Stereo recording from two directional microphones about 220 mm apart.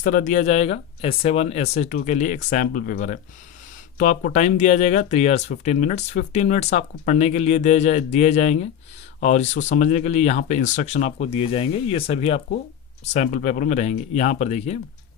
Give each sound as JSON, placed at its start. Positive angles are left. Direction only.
{"t": 0.0, "sound": "speech", "side_deg": 40}